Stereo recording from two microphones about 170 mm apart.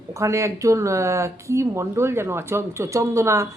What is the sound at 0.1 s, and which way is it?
Speech, 15° right (ahead or behind).